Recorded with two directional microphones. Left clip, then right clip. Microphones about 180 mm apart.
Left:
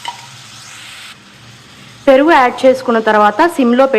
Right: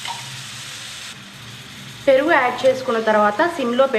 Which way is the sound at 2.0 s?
45° left (ahead or behind).